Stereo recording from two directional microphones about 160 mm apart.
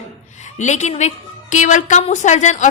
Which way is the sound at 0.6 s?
45° left (ahead or behind).